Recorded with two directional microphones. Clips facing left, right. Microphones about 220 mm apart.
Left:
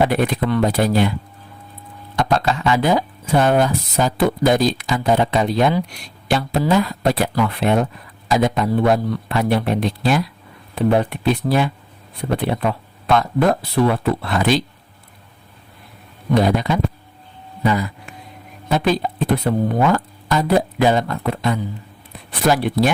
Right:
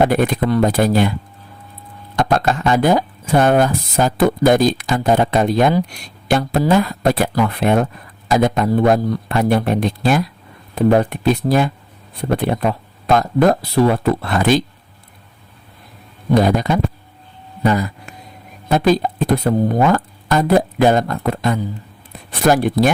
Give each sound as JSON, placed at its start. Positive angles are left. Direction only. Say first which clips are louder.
{"t": 0.0, "sound": "speech", "louder": "right 3 dB", "side_deg": -45}
{"t": 2.1, "sound": "speech", "louder": "right 2 dB", "side_deg": -50}
{"t": 16.3, "sound": "speech", "louder": "right 2 dB", "side_deg": -45}
{"t": 17.6, "sound": "a sound", "louder": "right 2 dB", "side_deg": -45}
{"t": 18.7, "sound": "speech", "louder": "right 4 dB", "side_deg": -45}